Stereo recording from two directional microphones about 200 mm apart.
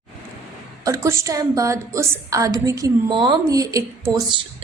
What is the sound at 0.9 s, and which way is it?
A woman's voice, 15° right (ahead or behind).